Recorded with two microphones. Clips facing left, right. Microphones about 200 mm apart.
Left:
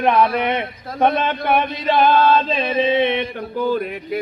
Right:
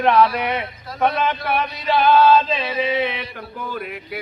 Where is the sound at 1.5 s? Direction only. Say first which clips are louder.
Left 3 dB; 50° left (ahead or behind).